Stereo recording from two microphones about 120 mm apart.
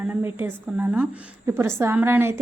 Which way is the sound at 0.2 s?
20° right (ahead or behind).